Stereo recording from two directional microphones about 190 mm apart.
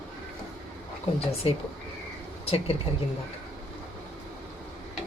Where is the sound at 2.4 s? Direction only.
30° left (ahead or behind).